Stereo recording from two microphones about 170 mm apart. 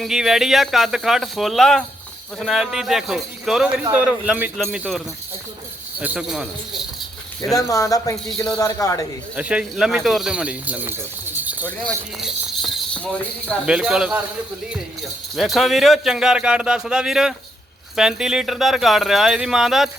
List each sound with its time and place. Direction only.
0.0 s speech: centre (ahead or behind)
7.5 s speech: 20° left (ahead or behind)
9.3 s speech: 5° right (ahead or behind)
12.2 s a sound: centre (ahead or behind)
13.7 s speech: 5° right (ahead or behind)
15.4 s speech: centre (ahead or behind)